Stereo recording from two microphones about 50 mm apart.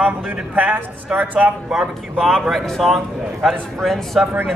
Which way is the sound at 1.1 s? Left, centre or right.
Right.